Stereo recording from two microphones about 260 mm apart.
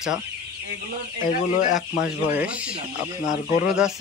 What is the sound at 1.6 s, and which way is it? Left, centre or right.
Speech, left.